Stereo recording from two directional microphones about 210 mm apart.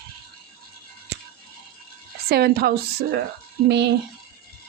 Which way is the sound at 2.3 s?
50° right (ahead or behind).